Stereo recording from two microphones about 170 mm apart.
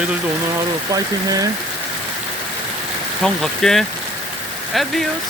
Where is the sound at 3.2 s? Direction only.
Centre (ahead or behind).